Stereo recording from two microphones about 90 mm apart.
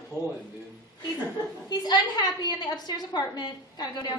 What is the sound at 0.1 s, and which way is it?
Speech, 40° right (ahead or behind).